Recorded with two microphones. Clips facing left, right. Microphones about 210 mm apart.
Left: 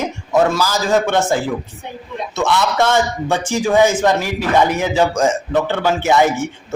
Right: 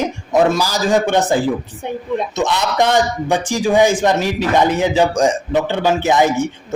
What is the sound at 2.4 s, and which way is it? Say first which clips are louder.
A man's voice: left 2 dB; 15° right (ahead or behind).